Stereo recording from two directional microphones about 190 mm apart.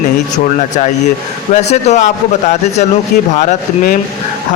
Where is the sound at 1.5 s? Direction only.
35° left (ahead or behind).